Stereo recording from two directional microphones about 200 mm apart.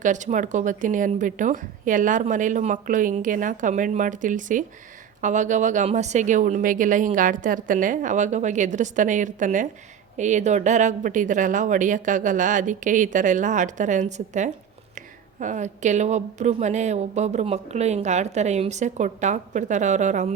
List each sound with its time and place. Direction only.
0.0 s speech: 40° right (ahead or behind)